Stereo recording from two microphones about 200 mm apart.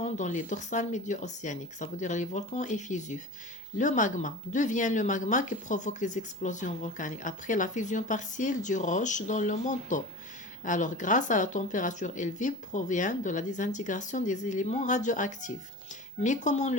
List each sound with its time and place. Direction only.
0.0 s speech: 35° left (ahead or behind)